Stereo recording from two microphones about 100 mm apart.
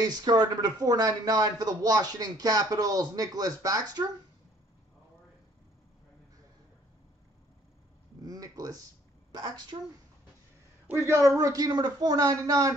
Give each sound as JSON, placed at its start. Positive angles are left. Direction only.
{"t": 0.0, "sound": "speech", "side_deg": -45}
{"t": 8.2, "sound": "a sound", "side_deg": -40}
{"t": 9.3, "sound": "a woman's voice", "side_deg": -45}
{"t": 11.0, "sound": "speech", "side_deg": -30}